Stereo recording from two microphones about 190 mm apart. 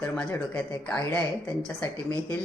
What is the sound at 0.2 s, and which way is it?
Speech, 10° left (ahead or behind).